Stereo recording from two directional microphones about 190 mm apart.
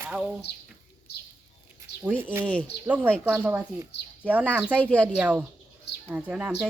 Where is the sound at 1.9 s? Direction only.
60° left (ahead or behind).